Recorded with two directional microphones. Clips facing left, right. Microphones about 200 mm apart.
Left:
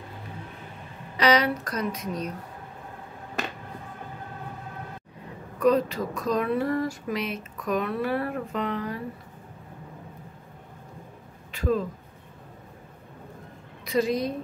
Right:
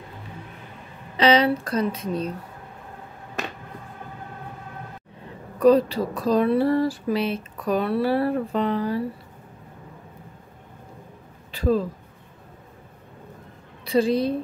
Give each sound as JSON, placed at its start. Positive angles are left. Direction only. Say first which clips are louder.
{"t": 1.1, "sound": "a woman's voice", "louder": "right 4 dB", "side_deg": -25}
{"t": 5.6, "sound": "speech", "louder": "right 5 dB", "side_deg": -35}
{"t": 11.5, "sound": "a sound", "louder": "right 4 dB", "side_deg": -35}
{"t": 13.8, "sound": "a woman's voice", "louder": "right 4 dB", "side_deg": -30}